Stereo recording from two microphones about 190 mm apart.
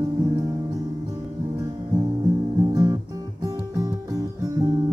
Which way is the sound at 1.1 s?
15° right (ahead or behind).